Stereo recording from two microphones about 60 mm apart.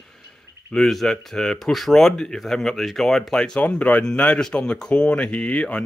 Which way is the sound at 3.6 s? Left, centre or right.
Left.